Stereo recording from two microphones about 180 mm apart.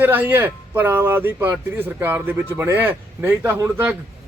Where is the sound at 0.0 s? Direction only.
10° right (ahead or behind).